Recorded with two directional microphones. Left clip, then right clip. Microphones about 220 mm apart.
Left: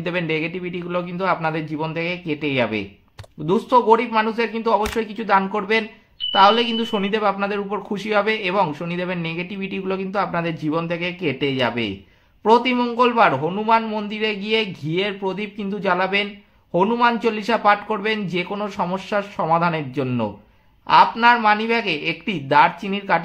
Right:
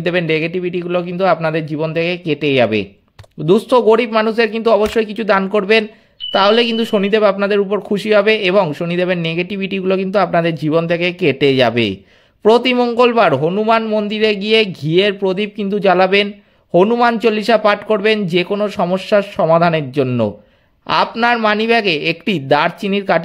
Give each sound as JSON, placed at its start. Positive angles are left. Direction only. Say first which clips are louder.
{"t": 0.0, "sound": "speech", "louder": "right 7 dB", "side_deg": -35}